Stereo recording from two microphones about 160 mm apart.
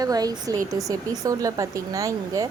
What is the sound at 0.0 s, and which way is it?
Speech, 25° right (ahead or behind).